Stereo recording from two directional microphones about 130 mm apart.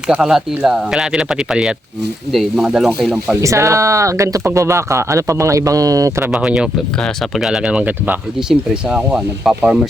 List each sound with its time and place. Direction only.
0.1 s speech: 5° right (ahead or behind)
3.4 s speech: 20° right (ahead or behind)
6.3 s speech: 5° right (ahead or behind)